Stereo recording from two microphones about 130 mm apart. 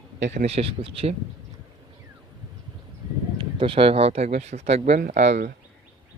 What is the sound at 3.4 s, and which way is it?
Speech, 40° right (ahead or behind).